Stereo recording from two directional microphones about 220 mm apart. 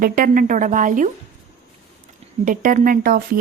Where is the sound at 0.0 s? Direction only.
40° right (ahead or behind).